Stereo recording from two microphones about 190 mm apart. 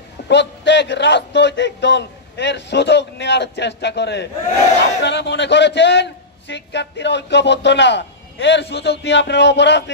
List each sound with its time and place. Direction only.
0.3 s a man's voice: 65° left (ahead or behind)